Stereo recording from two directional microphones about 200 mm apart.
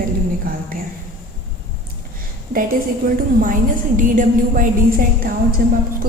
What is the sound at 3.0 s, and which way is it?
A woman's voice, 45° right (ahead or behind).